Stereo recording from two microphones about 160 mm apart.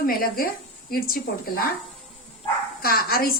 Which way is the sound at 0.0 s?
65° left (ahead or behind).